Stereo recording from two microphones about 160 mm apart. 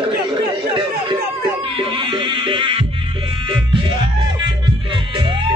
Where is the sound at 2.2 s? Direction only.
30° right (ahead or behind).